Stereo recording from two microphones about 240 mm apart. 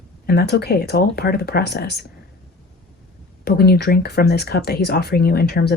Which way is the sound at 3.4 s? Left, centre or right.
Left.